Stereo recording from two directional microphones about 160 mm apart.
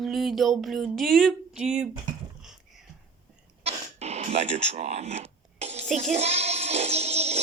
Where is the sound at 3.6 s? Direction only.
45° right (ahead or behind).